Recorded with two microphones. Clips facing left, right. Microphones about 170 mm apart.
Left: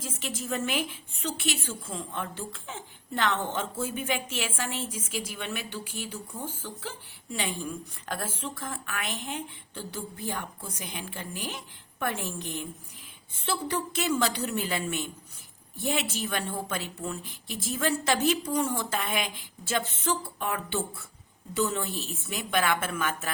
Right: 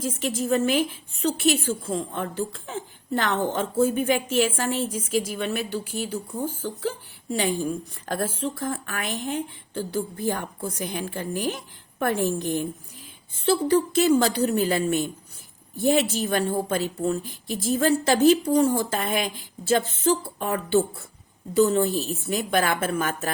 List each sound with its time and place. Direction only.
0.0 s a woman's voice: 40° right (ahead or behind)